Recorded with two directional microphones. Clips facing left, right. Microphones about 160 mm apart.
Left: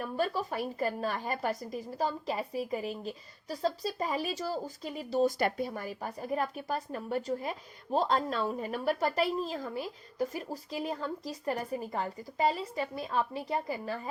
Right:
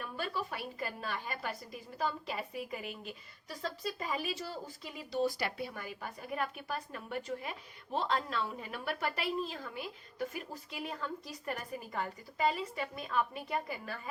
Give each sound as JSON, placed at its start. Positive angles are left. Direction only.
{"t": 0.0, "sound": "a woman's voice", "side_deg": 40}